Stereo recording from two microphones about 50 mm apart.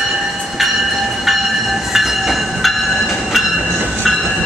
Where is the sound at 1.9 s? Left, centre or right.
Centre.